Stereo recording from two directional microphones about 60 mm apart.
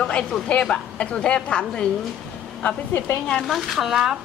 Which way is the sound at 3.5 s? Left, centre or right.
Centre.